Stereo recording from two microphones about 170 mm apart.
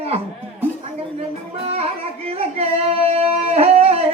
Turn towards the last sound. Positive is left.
turn(degrees=-35)  # may be behind; listen again after turning